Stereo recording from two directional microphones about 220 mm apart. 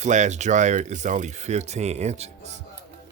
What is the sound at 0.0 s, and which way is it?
Speech, 30° right (ahead or behind).